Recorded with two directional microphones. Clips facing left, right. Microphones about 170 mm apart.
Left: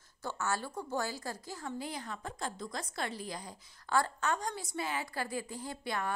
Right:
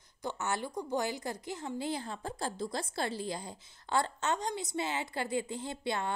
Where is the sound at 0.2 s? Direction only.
20° right (ahead or behind).